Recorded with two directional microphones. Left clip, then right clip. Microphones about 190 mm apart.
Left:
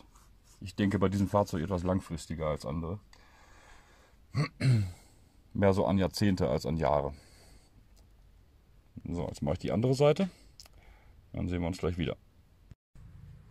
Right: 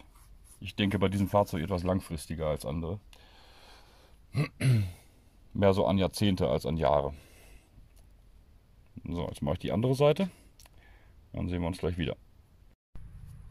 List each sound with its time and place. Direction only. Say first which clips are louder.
0.6 s speech: right 1 dB; centre (ahead or behind)
5.6 s speech: right 2 dB; centre (ahead or behind)
9.0 s speech: right 1 dB; centre (ahead or behind)